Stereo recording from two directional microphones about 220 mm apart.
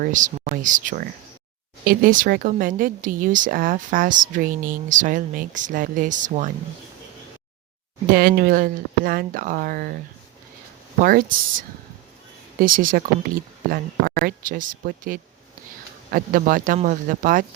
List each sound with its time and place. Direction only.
0.0 s speech: 35° right (ahead or behind)
8.1 s speech: 40° right (ahead or behind)
11.0 s speech: 40° right (ahead or behind)
12.5 s speech: 40° right (ahead or behind)